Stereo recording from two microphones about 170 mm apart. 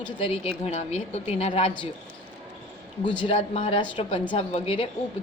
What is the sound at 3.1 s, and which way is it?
A woman's voice, 35° left (ahead or behind).